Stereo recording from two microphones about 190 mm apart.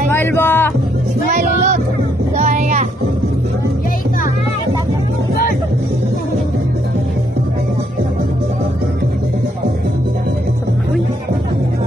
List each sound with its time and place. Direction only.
0.1 s music: 10° left (ahead or behind)
2.3 s vehicle: 35° right (ahead or behind)